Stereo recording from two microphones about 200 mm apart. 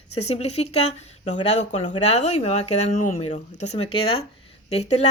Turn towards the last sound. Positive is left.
turn(degrees=35)  # may be behind; listen again after turning